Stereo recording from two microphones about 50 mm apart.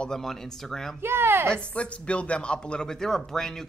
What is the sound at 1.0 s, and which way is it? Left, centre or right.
Speech, right.